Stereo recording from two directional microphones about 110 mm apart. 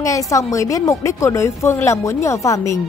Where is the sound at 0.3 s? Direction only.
30° left (ahead or behind).